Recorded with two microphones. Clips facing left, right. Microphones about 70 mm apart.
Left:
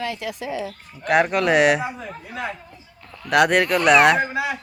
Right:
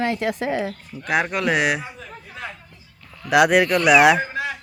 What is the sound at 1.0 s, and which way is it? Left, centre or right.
Speech, centre.